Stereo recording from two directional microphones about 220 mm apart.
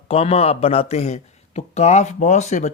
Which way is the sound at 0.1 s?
25° left (ahead or behind).